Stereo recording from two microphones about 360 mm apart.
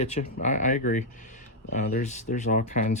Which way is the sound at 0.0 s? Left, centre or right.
Centre.